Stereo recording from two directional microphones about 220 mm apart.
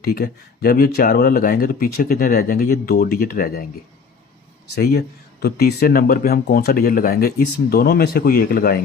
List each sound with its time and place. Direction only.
0.0 s speech: 45° left (ahead or behind)
4.7 s speech: 45° left (ahead or behind)